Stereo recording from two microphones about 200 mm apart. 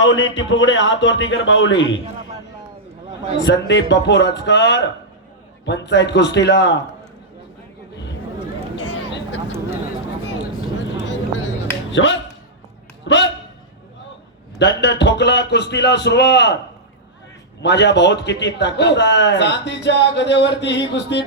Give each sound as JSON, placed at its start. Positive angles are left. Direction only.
{"t": 0.0, "sound": "speech", "side_deg": 70}
{"t": 3.4, "sound": "a man's voice", "side_deg": 65}
{"t": 8.8, "sound": "a sound", "side_deg": 70}
{"t": 11.0, "sound": "music", "side_deg": 65}
{"t": 13.1, "sound": "a man's voice", "side_deg": 65}
{"t": 14.6, "sound": "a man's voice", "side_deg": 60}
{"t": 17.6, "sound": "a man's voice", "side_deg": 60}